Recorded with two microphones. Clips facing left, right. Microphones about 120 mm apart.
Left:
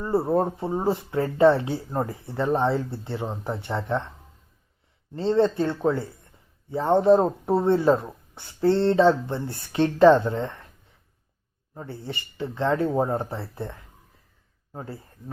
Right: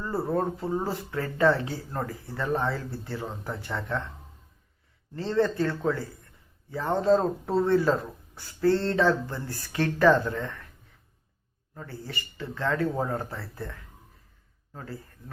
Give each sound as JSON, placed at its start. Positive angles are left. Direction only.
{"t": 0.0, "sound": "speech", "side_deg": 25}
{"t": 5.1, "sound": "speech", "side_deg": 20}
{"t": 11.7, "sound": "speech", "side_deg": 25}